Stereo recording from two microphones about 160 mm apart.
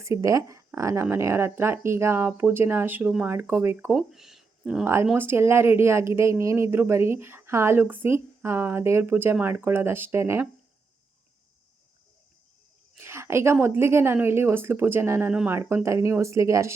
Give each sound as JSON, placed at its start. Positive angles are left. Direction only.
{"t": 0.0, "sound": "speech", "side_deg": -20}
{"t": 4.1, "sound": "a sound", "side_deg": 0}
{"t": 5.0, "sound": "speech", "side_deg": -15}
{"t": 13.0, "sound": "speech", "side_deg": -15}